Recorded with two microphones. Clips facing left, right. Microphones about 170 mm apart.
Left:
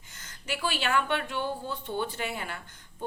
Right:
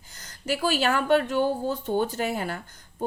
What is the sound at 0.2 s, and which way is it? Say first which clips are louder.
A woman's voice: right 6 dB; 40° right (ahead or behind).